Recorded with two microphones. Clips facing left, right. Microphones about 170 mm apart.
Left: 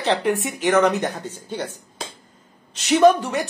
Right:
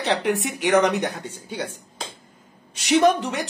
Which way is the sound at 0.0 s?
20° right (ahead or behind).